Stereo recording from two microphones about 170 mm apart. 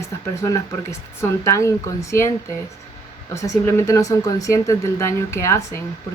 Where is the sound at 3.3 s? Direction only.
15° left (ahead or behind).